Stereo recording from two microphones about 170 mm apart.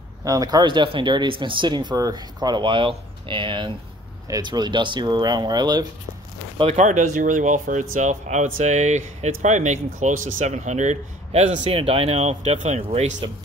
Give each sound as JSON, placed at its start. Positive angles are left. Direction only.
{"t": 0.2, "sound": "speech", "side_deg": -20}
{"t": 6.6, "sound": "speech", "side_deg": -40}